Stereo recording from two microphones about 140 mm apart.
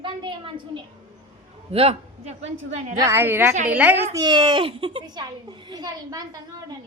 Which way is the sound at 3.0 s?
15° right (ahead or behind).